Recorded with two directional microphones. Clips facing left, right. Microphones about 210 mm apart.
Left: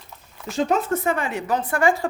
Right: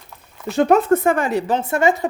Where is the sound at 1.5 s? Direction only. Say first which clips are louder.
Even; 25° right (ahead or behind).